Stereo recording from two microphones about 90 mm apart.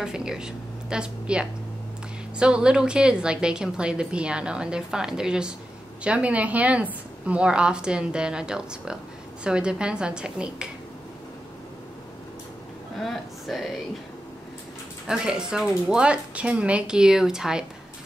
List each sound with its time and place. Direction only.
0.0 s a woman's voice: 5° right (ahead or behind)
12.9 s speech: centre (ahead or behind)
15.0 s a woman's voice: 10° right (ahead or behind)